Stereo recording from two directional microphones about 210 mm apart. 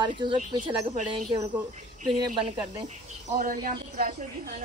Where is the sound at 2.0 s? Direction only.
25° right (ahead or behind).